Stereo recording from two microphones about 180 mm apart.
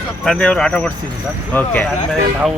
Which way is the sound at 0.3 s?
5° left (ahead or behind).